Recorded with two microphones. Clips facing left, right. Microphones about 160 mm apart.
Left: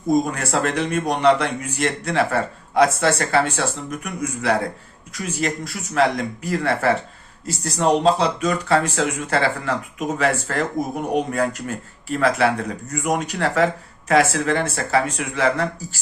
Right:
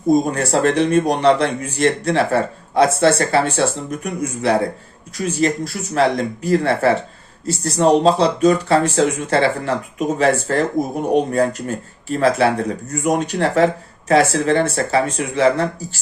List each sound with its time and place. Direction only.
0.1 s speech: 30° right (ahead or behind)
11.1 s speech: 30° right (ahead or behind)